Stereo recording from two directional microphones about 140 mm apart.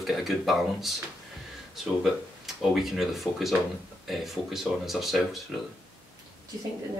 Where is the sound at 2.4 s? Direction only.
Centre (ahead or behind).